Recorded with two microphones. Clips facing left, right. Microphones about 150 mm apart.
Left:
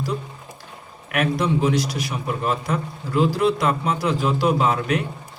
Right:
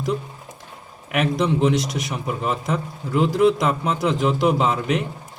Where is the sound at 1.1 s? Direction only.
20° right (ahead or behind).